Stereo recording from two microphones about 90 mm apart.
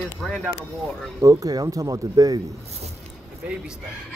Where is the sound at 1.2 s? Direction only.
40° right (ahead or behind).